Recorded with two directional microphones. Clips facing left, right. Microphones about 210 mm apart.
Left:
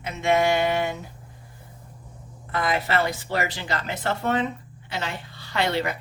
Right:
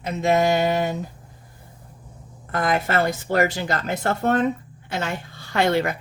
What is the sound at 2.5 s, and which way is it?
Speech, 50° right (ahead or behind).